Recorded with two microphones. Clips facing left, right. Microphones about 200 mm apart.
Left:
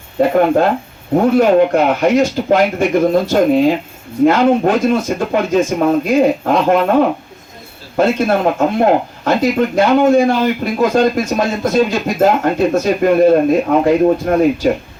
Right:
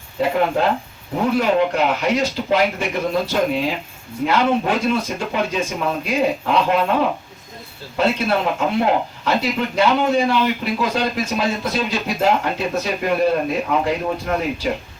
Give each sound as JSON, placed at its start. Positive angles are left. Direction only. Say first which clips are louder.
{"t": 0.2, "sound": "speech", "louder": "left 7 dB", "side_deg": 50}
{"t": 7.9, "sound": "speech", "louder": "left 5 dB", "side_deg": 50}